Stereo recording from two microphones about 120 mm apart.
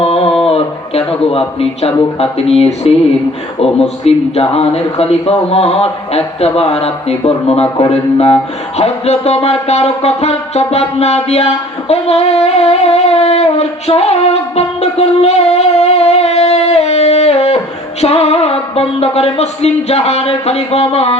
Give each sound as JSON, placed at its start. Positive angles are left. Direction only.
{"t": 0.0, "sound": "a sound", "side_deg": 55}
{"t": 0.4, "sound": "speech", "side_deg": 55}
{"t": 8.8, "sound": "music", "side_deg": 60}
{"t": 18.0, "sound": "speech", "side_deg": 65}